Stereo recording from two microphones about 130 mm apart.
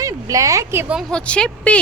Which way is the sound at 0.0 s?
25° right (ahead or behind).